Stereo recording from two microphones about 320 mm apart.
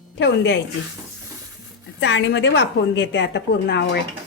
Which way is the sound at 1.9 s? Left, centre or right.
Left.